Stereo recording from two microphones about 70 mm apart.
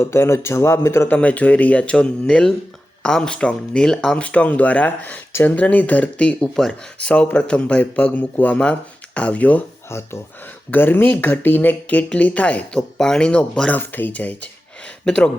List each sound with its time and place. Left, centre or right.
0.0 s speech: left
1.0 s speech: centre
6.5 s speech: centre
7.0 s speech: centre
9.9 s speech: left
10.7 s speech: left; by 13.7 s centre
13.7 s speech: left